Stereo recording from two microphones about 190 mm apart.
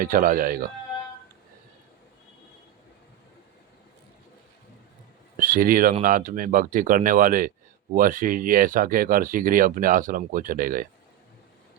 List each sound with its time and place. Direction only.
0.0 s speech: 45° right (ahead or behind)
5.4 s speech: 45° right (ahead or behind)